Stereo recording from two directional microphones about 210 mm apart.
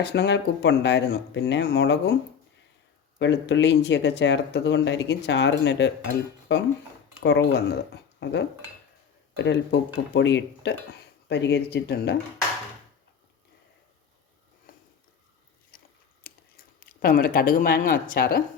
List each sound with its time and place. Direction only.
0.0 s speech: 55° left (ahead or behind)
3.2 s speech: 60° left (ahead or behind)
14.7 s a sound: 40° left (ahead or behind)
16.2 s speech: 45° left (ahead or behind)